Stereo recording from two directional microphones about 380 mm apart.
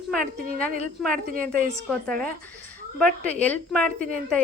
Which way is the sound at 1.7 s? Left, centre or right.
Centre.